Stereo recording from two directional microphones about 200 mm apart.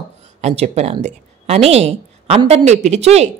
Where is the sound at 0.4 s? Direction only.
35° right (ahead or behind).